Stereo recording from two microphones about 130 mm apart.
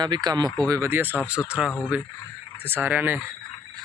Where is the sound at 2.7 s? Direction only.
15° right (ahead or behind).